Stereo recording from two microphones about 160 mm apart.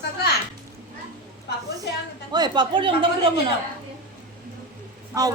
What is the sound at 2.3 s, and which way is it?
Speech, 25° right (ahead or behind).